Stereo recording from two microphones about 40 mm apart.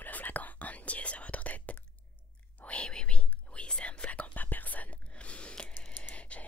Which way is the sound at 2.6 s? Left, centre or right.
Left.